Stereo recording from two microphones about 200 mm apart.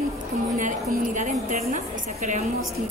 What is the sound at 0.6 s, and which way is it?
Speech, 40° right (ahead or behind).